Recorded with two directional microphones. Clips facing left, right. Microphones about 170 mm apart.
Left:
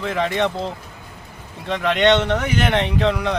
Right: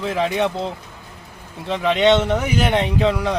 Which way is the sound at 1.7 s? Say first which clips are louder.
Right 1 dB; centre (ahead or behind).